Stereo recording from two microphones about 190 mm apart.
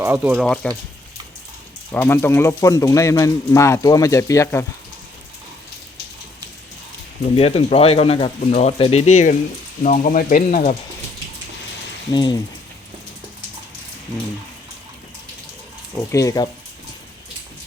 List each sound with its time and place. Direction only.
0.0 s speech: 10° right (ahead or behind)
0.4 s speech: 5° left (ahead or behind)
1.9 s speech: 10° left (ahead or behind)
7.3 s speech: 30° left (ahead or behind)
12.1 s speech: 25° left (ahead or behind)
16.1 s speech: 20° left (ahead or behind)